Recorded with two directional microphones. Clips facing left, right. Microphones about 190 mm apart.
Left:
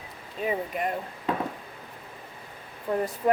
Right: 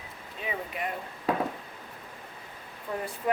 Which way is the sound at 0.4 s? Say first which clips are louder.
Left 6 dB; 45° left (ahead or behind).